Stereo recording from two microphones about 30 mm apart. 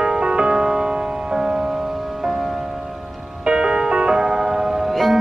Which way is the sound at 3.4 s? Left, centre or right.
Right.